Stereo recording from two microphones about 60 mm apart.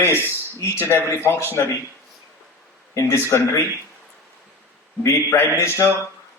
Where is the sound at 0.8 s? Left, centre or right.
Left.